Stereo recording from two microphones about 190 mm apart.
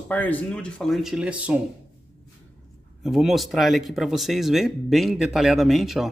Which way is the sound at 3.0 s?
Centre (ahead or behind).